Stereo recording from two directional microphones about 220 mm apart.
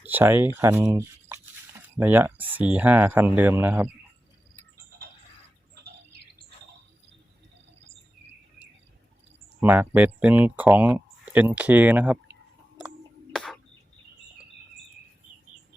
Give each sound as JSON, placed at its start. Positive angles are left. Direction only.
{"t": 0.0, "sound": "speech", "side_deg": -10}
{"t": 5.8, "sound": "bird", "side_deg": -45}
{"t": 9.6, "sound": "speech", "side_deg": -10}
{"t": 13.3, "sound": "whispering", "side_deg": 0}